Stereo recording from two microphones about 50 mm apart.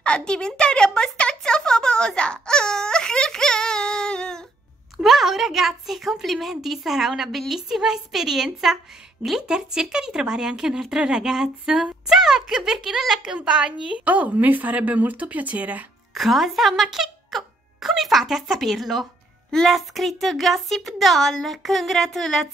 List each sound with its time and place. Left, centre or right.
0.0 s a sound: centre
5.0 s a woman's voice: centre
9.5 s a woman's voice: centre
13.5 s a woman's voice: centre
16.2 s a child's voice: centre